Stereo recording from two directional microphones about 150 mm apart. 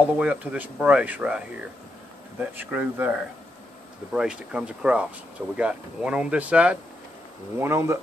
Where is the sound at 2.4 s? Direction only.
10° right (ahead or behind).